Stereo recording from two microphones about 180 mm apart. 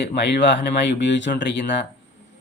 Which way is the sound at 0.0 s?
70° left (ahead or behind).